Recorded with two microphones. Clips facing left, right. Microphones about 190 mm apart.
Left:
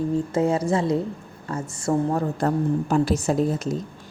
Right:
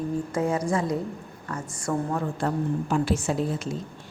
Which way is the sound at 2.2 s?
40° left (ahead or behind).